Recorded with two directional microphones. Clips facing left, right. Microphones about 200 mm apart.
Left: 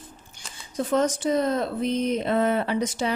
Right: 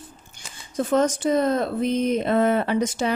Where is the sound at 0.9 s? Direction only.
50° right (ahead or behind).